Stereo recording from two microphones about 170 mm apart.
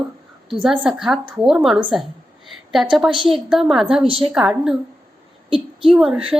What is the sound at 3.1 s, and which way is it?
Speech, 30° right (ahead or behind).